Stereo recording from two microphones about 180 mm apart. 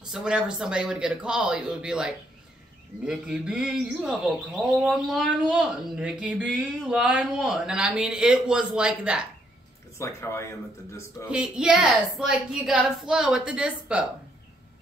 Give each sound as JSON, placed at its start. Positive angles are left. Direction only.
{"t": 0.1, "sound": "speech", "side_deg": -5}
{"t": 9.9, "sound": "speech", "side_deg": 15}
{"t": 11.2, "sound": "speech", "side_deg": -5}